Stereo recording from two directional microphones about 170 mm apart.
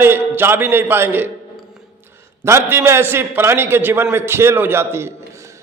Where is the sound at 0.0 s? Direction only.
10° right (ahead or behind).